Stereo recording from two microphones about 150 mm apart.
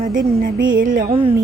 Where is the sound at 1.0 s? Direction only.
40° right (ahead or behind).